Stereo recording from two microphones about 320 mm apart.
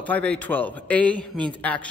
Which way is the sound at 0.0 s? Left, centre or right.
Centre.